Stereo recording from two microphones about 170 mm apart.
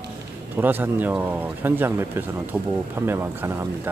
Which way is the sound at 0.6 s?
10° right (ahead or behind).